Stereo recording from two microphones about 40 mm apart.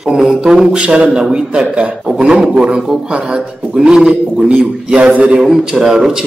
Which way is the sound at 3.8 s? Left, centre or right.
Centre.